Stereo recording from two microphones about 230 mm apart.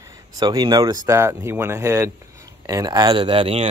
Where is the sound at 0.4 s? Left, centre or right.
Centre.